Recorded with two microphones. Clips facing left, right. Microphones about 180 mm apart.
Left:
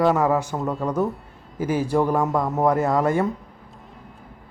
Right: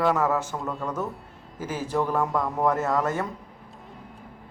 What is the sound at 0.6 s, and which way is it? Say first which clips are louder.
Speech: left 7 dB; 35° left (ahead or behind).